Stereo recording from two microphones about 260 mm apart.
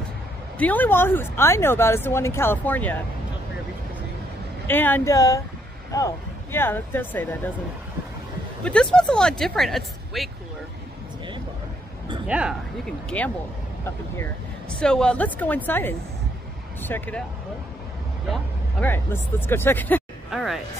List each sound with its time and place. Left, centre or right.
0.6 s speech: centre
4.6 s speech: centre
8.6 s speech: centre
12.3 s speech: centre
14.8 s speech: centre
18.3 s speech: centre